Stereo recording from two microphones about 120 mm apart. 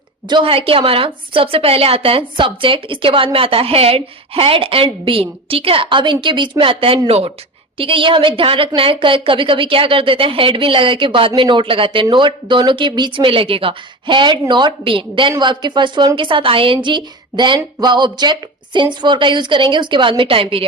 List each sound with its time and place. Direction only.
0.3 s a woman's voice: 45° right (ahead or behind)